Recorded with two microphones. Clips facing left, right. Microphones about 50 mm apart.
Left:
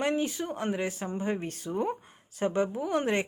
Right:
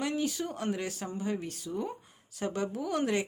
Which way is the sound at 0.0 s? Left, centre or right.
Left.